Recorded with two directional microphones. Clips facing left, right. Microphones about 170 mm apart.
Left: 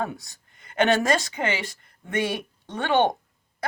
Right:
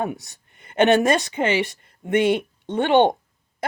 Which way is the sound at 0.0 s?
20° right (ahead or behind).